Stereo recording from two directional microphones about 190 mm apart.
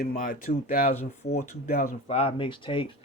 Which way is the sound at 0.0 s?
45° left (ahead or behind).